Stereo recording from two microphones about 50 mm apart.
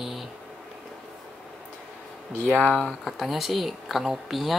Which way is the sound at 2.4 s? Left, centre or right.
Left.